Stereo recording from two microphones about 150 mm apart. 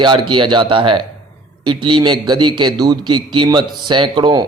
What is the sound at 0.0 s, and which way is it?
A man's voice, 30° right (ahead or behind).